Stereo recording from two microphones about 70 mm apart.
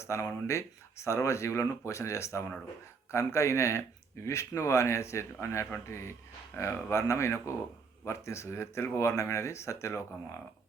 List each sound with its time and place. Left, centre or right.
0.0 s speech: left